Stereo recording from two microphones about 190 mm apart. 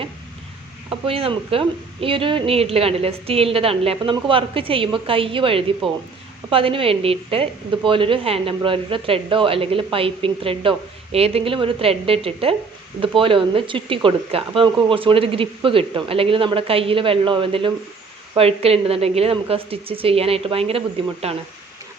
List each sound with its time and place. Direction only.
0.9 s a woman's voice: 30° right (ahead or behind)